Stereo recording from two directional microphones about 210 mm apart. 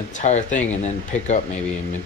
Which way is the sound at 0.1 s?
35° left (ahead or behind).